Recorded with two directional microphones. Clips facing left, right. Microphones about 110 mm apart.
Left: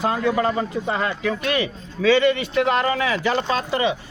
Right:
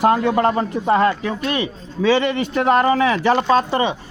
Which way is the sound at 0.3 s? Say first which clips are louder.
Right 4 dB; 50° right (ahead or behind).